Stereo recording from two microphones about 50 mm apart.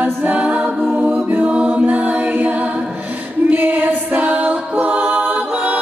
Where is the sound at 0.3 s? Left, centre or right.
Right.